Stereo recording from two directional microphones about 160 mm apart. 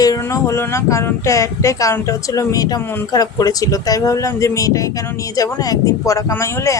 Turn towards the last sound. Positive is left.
turn(degrees=15)  # may be behind; listen again after turning